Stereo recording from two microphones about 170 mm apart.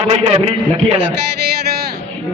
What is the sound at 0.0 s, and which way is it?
Speech, 35° right (ahead or behind).